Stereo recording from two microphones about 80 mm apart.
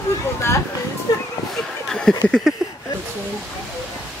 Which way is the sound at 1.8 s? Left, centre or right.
Centre.